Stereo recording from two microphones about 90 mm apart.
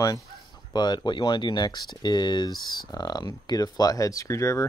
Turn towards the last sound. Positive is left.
turn(degrees=35)  # may be behind; listen again after turning